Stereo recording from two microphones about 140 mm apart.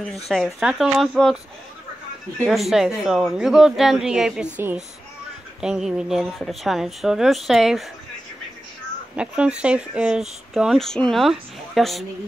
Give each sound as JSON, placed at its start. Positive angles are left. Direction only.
{"t": 0.0, "sound": "speech", "side_deg": 5}
{"t": 2.4, "sound": "speech", "side_deg": 0}
{"t": 5.6, "sound": "speech", "side_deg": -5}
{"t": 9.1, "sound": "speech", "side_deg": -5}